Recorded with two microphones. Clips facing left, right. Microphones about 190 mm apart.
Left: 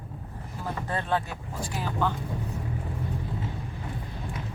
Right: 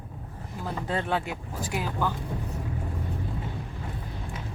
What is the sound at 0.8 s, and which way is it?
Speech, 15° right (ahead or behind).